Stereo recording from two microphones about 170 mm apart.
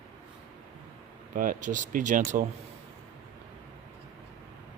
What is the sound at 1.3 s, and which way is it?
Speech, 55° right (ahead or behind).